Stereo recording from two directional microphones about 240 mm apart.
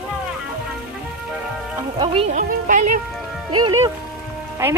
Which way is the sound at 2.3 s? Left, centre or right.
Right.